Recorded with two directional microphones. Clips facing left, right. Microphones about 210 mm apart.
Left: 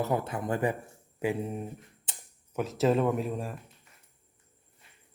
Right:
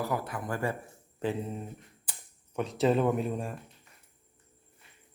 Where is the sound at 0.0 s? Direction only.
25° left (ahead or behind).